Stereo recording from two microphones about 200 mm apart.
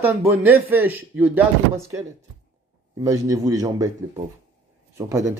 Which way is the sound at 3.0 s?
15° right (ahead or behind).